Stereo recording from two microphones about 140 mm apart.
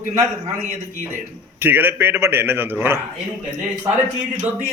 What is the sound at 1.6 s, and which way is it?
A man's voice, 15° right (ahead or behind).